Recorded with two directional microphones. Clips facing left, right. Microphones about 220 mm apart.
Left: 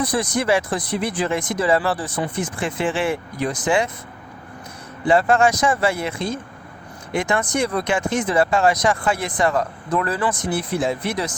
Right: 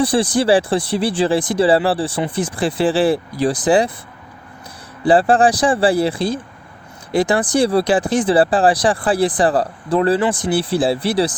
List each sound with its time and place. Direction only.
0.0 s speech: 30° right (ahead or behind)
5.0 s speech: 35° right (ahead or behind)